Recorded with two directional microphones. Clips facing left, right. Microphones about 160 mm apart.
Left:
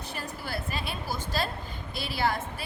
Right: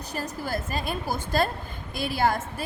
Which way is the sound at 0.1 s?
40° right (ahead or behind).